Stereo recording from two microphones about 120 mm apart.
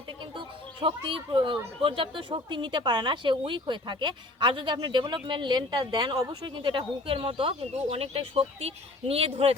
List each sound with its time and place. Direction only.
0.3 s speech: 45° right (ahead or behind)